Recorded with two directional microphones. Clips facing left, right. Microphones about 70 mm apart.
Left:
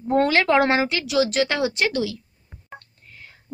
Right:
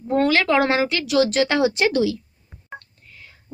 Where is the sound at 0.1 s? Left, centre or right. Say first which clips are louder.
Even; left.